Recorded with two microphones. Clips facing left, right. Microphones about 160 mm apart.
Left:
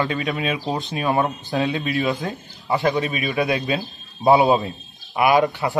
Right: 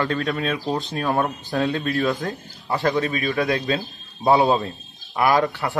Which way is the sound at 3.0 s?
15° left (ahead or behind).